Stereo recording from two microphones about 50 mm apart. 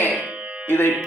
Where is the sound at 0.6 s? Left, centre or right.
Left.